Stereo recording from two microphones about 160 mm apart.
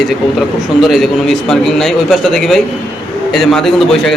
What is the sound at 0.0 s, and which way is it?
A man's voice, centre (ahead or behind).